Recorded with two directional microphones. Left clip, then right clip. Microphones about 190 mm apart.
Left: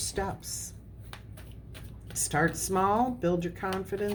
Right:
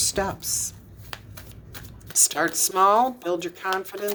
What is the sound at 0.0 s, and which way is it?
Speech, 35° right (ahead or behind).